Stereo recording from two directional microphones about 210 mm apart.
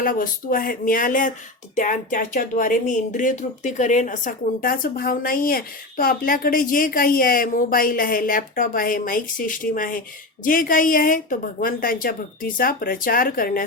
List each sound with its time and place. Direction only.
0.0 s a woman's voice: 40° left (ahead or behind)